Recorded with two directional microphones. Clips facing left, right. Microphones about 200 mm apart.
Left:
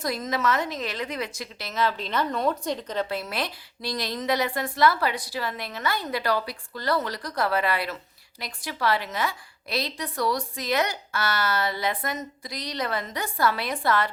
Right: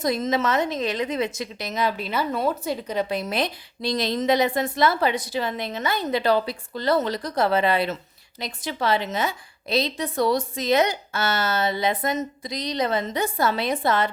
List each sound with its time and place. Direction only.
0.0 s a woman's voice: 20° right (ahead or behind)